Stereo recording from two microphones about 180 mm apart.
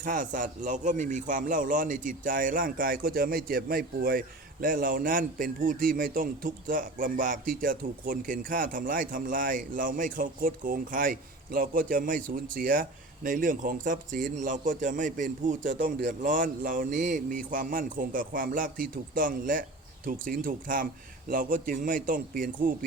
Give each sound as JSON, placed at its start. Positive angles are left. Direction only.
{"t": 0.0, "sound": "a man's voice", "side_deg": -45}